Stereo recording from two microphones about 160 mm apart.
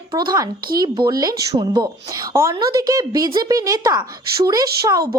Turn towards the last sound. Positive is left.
turn(degrees=-20)  # may be behind; listen again after turning